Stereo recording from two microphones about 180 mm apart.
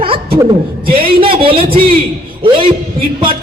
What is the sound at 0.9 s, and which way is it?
Speech, 30° right (ahead or behind).